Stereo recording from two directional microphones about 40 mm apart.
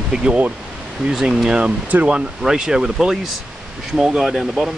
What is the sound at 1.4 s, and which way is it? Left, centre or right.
Speech, right.